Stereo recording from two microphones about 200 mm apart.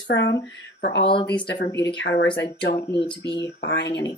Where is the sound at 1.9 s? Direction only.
55° left (ahead or behind).